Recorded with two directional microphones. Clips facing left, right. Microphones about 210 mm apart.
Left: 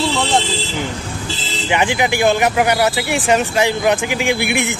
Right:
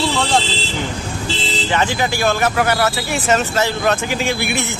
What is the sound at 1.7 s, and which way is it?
Speech, 15° left (ahead or behind).